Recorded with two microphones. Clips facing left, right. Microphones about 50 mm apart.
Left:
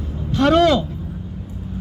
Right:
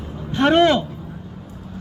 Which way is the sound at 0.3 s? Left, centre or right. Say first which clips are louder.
Even; right.